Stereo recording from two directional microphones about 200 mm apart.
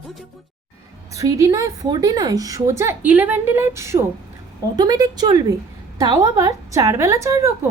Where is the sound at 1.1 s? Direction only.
15° right (ahead or behind).